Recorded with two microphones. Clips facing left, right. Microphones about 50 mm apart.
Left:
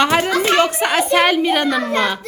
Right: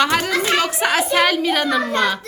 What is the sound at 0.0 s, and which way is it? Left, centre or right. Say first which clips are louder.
Music: left 2 dB; centre.